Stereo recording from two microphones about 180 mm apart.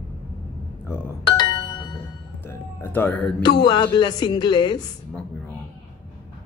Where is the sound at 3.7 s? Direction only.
25° left (ahead or behind).